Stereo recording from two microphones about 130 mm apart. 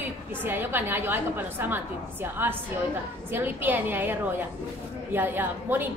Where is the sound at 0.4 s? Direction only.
15° right (ahead or behind).